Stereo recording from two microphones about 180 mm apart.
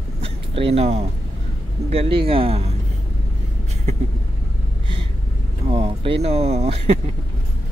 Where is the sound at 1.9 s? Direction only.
30° right (ahead or behind).